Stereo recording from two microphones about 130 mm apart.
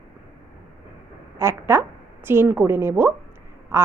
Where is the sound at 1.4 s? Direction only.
20° right (ahead or behind).